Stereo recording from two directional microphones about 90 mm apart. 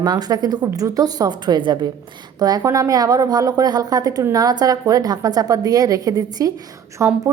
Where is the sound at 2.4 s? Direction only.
45° right (ahead or behind).